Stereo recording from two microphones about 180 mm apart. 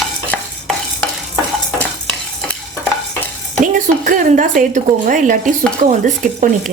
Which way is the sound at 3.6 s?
45° right (ahead or behind).